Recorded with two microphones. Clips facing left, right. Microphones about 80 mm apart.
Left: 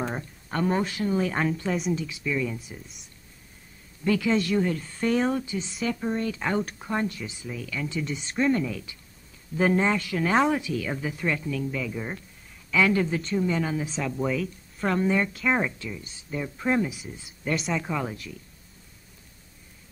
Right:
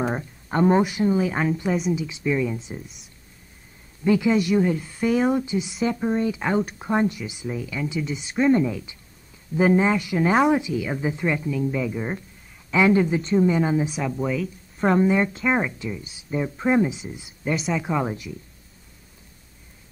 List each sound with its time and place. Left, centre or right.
0.0 s speech: centre
1.1 s speech: centre
2.0 s a woman's voice: right
4.0 s speech: centre
5.3 s a woman's voice: centre
8.5 s a woman's voice: right
9.6 s a woman's voice: centre
14.1 s speech: centre
14.9 s a woman's voice: centre
17.5 s speech: centre
17.8 s a woman's voice: right